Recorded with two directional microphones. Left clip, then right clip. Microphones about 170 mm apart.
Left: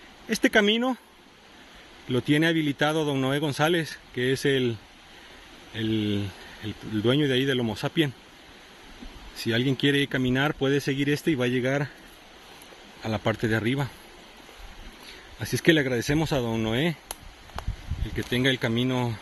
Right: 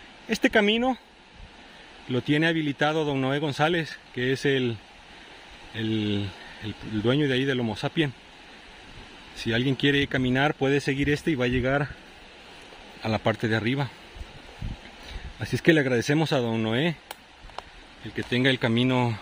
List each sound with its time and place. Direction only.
0.3 s speech: 10° right (ahead or behind)
2.0 s speech: centre (ahead or behind)
5.8 s speech: 10° right (ahead or behind)
9.4 s speech: 10° right (ahead or behind)
13.0 s speech: 15° right (ahead or behind)
15.3 s speech: 20° right (ahead or behind)
18.1 s speech: 20° right (ahead or behind)